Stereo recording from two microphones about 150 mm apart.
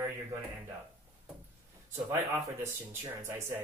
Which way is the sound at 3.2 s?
20° right (ahead or behind).